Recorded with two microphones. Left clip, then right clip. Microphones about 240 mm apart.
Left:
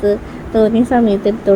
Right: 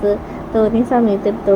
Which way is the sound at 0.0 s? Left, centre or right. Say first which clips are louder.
Left 1 dB; centre.